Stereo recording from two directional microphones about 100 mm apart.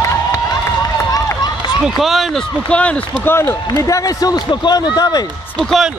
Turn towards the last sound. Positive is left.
turn(degrees=5)  # may be behind; listen again after turning